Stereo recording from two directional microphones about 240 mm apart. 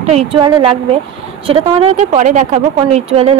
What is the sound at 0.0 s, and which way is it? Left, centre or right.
A woman's voice, right.